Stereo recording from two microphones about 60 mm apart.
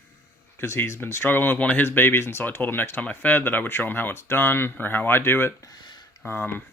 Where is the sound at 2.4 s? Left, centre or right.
Left.